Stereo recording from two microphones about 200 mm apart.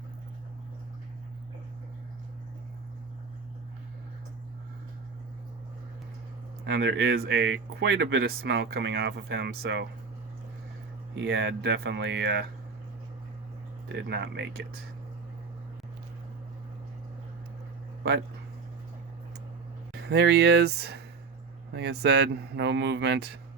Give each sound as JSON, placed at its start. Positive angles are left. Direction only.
{"t": 6.7, "sound": "speech", "side_deg": -55}
{"t": 11.1, "sound": "speech", "side_deg": -60}
{"t": 13.8, "sound": "speech", "side_deg": -60}
{"t": 19.9, "sound": "speech", "side_deg": -60}